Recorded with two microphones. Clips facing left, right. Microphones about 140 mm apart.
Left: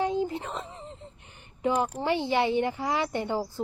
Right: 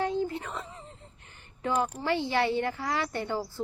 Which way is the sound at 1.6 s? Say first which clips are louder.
Left 2 dB; 20° left (ahead or behind).